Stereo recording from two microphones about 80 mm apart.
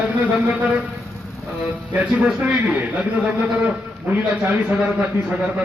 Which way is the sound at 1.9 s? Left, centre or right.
Centre.